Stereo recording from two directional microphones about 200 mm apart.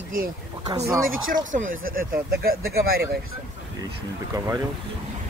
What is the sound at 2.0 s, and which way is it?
Speech, 45° right (ahead or behind).